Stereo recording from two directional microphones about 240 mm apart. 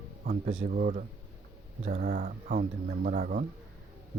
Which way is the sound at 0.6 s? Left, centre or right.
Right.